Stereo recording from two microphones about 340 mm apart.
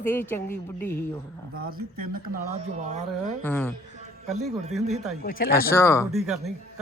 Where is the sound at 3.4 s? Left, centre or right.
Centre.